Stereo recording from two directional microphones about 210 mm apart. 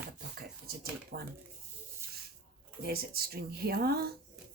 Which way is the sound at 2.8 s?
45° right (ahead or behind).